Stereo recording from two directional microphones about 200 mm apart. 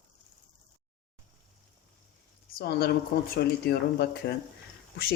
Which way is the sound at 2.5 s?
50° left (ahead or behind).